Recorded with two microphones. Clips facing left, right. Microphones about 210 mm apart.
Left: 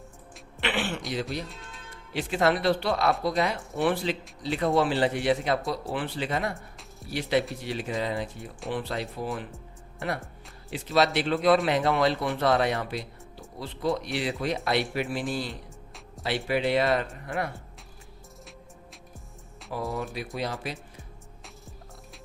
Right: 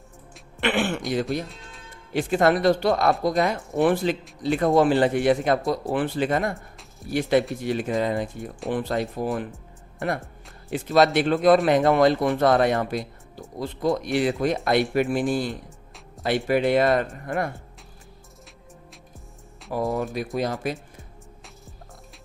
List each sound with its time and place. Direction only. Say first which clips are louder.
0.6 s speech: right 6 dB; 50° right (ahead or behind)
6.5 s music: right 4 dB; centre (ahead or behind)
7.1 s speech: right 5 dB; 50° right (ahead or behind)
10.7 s speech: right 5 dB; 50° right (ahead or behind)
19.7 s speech: right 6 dB; 45° right (ahead or behind)